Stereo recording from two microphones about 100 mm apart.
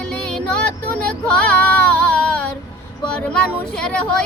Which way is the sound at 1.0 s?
15° left (ahead or behind).